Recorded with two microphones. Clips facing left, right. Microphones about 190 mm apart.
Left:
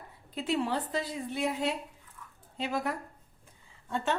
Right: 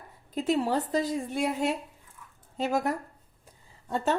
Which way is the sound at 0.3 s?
40° right (ahead or behind).